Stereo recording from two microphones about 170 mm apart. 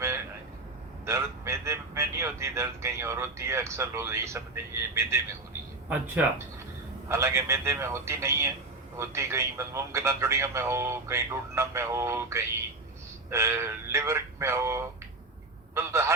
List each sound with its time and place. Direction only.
1.0 s a man's voice: 15° right (ahead or behind)